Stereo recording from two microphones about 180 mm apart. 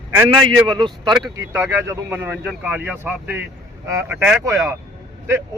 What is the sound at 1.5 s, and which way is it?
Speech, 15° right (ahead or behind).